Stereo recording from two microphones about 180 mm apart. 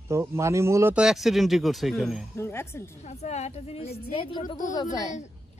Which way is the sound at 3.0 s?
40° left (ahead or behind).